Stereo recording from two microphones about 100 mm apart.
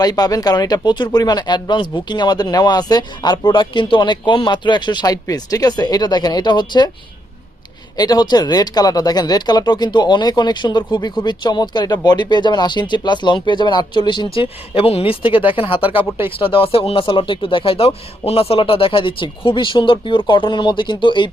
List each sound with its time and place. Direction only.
0.0 s speech: 40° left (ahead or behind)
7.9 s speech: 40° left (ahead or behind)